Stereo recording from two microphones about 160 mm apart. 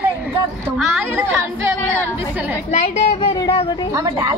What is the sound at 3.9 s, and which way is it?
Speech, 20° right (ahead or behind).